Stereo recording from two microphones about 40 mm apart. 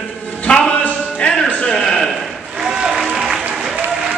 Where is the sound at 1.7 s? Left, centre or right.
Centre.